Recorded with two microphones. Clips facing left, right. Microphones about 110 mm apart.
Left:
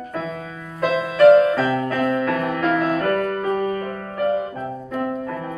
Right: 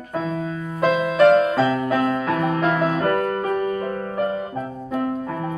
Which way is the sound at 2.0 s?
5° right (ahead or behind).